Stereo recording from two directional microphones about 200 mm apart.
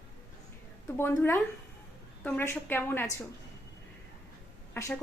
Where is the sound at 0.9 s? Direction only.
10° left (ahead or behind).